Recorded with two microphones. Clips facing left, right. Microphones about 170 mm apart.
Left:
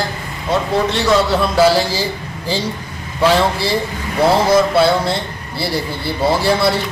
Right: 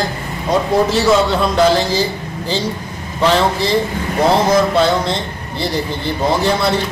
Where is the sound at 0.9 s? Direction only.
5° left (ahead or behind).